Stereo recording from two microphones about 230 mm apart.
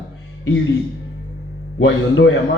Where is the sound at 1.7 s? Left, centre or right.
Left.